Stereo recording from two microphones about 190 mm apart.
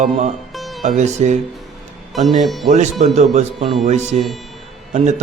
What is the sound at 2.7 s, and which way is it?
Speech, 40° right (ahead or behind).